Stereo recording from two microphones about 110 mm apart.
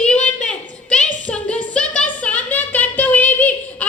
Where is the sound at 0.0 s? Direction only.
10° left (ahead or behind).